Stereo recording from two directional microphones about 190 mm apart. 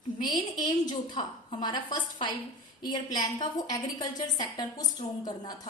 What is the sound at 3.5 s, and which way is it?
A woman's voice, 20° left (ahead or behind).